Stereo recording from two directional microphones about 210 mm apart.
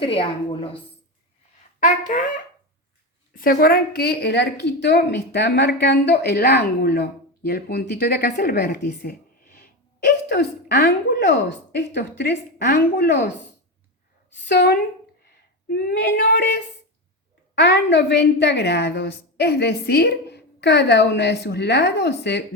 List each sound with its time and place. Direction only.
0.0 s a woman's voice: 25° left (ahead or behind)
1.8 s speech: 35° left (ahead or behind)
3.3 s a woman's voice: 45° left (ahead or behind)